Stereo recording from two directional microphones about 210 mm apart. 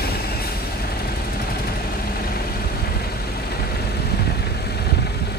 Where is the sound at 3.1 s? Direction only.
50° left (ahead or behind).